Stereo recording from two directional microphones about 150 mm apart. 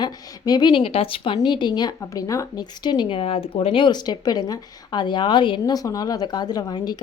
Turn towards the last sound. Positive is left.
turn(degrees=25)  # may be behind; listen again after turning